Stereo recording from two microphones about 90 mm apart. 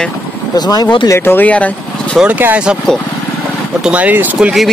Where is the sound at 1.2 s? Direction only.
20° left (ahead or behind).